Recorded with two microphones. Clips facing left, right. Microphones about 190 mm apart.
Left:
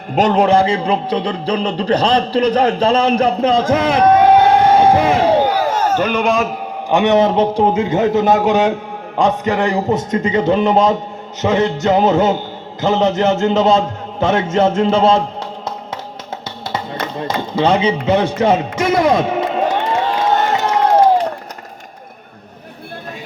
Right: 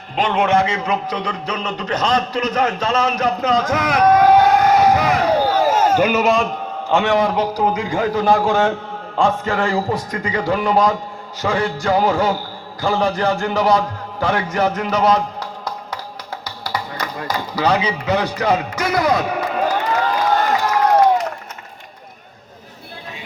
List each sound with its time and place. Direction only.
0.2 s a man's voice: 40° left (ahead or behind)
5.6 s a man's voice: 10° right (ahead or behind)
6.8 s a man's voice: 15° left (ahead or behind)
16.6 s chop: 25° left (ahead or behind)